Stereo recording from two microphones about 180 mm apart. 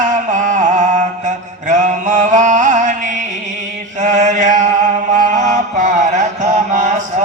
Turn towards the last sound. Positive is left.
turn(degrees=-45)  # may be behind; listen again after turning